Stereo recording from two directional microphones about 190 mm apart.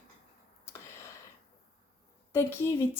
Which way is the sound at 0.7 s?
15° left (ahead or behind).